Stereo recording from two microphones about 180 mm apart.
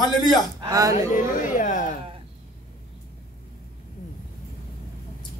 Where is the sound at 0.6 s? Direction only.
20° right (ahead or behind).